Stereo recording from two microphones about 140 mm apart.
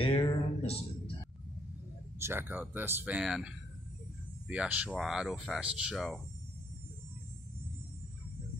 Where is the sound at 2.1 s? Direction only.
15° right (ahead or behind); by 6.2 s centre (ahead or behind).